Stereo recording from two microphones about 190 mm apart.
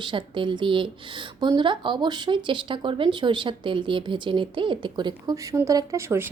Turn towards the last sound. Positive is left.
turn(degrees=-15)  # may be behind; listen again after turning